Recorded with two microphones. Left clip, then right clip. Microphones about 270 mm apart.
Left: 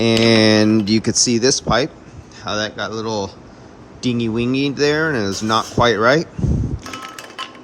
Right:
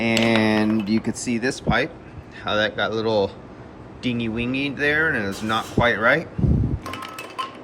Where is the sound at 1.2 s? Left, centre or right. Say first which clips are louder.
Left 9 dB; left.